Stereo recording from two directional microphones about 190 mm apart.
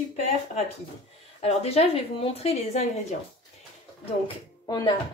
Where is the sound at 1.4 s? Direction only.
35° left (ahead or behind).